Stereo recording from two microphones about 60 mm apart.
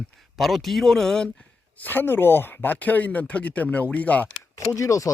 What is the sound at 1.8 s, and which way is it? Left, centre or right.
Speech, left.